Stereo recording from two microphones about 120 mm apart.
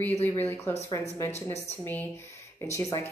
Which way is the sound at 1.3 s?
65° left (ahead or behind).